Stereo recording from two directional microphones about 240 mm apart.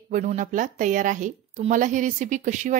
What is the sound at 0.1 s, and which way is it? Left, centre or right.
Speech, right.